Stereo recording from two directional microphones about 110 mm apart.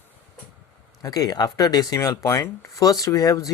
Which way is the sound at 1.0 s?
35° left (ahead or behind).